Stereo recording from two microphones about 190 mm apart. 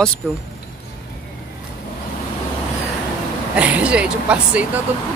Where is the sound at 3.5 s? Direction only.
5° right (ahead or behind).